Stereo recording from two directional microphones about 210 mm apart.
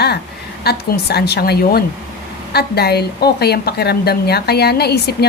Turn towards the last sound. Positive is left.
turn(degrees=50)  # may be behind; listen again after turning